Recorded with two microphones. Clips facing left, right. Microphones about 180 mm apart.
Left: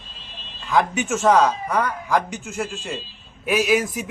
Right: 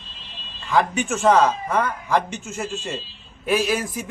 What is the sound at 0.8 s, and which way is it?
Speech, 20° left (ahead or behind).